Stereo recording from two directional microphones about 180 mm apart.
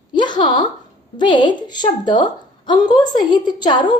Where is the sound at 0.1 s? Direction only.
25° left (ahead or behind).